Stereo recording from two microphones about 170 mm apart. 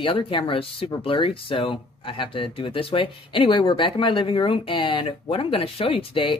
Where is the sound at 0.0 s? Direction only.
30° left (ahead or behind).